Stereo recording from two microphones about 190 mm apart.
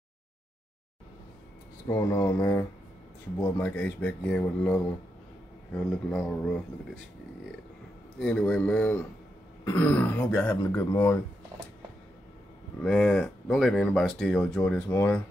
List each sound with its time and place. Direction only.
1.9 s speech: 15° left (ahead or behind)
6.0 s speech: 5° left (ahead or behind)
8.2 s speech: 5° left (ahead or behind)
12.8 s speech: 5° left (ahead or behind)